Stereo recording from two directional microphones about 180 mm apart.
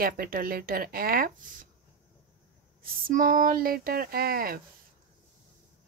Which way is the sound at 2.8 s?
50° right (ahead or behind).